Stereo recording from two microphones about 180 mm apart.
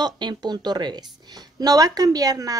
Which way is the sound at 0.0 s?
25° right (ahead or behind).